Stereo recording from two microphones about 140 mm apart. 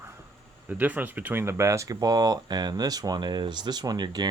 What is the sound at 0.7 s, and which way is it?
Speech, 10° right (ahead or behind).